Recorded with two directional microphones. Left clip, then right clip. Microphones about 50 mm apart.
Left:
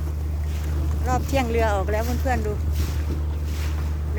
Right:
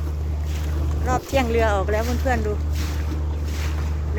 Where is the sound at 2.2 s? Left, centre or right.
Centre.